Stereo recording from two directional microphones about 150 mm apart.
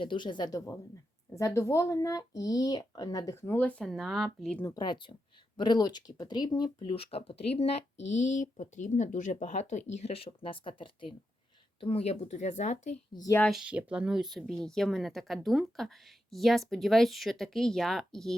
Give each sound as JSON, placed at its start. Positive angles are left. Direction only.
{"t": 0.0, "sound": "speech", "side_deg": 35}
{"t": 4.6, "sound": "speech", "side_deg": 30}
{"t": 8.2, "sound": "speech", "side_deg": 55}
{"t": 13.1, "sound": "speech", "side_deg": 25}
{"t": 13.4, "sound": "speech", "side_deg": 0}